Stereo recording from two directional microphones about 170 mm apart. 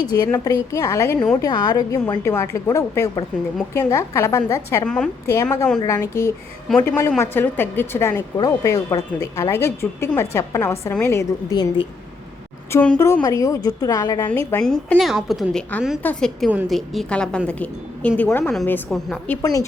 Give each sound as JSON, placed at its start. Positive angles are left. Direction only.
{"t": 0.0, "sound": "a woman's voice", "side_deg": 15}
{"t": 12.7, "sound": "a woman's voice", "side_deg": 5}
{"t": 14.6, "sound": "a woman's voice", "side_deg": 5}
{"t": 19.4, "sound": "a woman's voice", "side_deg": 20}